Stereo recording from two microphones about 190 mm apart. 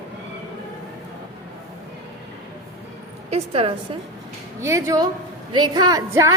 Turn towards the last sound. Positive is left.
turn(degrees=-15)  # may be behind; listen again after turning